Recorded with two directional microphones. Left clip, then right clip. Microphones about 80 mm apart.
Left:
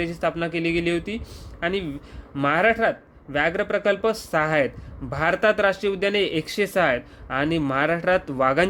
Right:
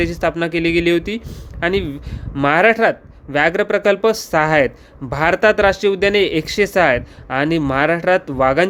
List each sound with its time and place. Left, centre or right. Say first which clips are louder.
0.0 s speech: right 7 dB; right
0.3 s speech: right 5 dB; right